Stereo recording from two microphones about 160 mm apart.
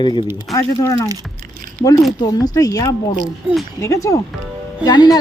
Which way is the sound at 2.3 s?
20° left (ahead or behind).